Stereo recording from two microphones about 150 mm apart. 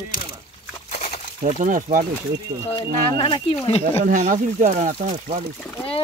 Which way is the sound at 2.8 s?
35° left (ahead or behind).